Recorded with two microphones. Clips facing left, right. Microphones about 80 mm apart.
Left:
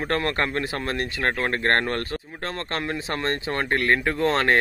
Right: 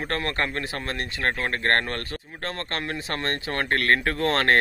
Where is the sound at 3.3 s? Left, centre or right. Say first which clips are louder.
Even; centre.